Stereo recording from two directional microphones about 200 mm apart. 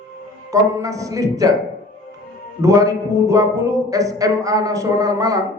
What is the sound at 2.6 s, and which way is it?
Speech, 15° right (ahead or behind).